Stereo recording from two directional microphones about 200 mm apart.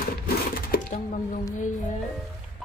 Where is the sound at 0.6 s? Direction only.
45° left (ahead or behind).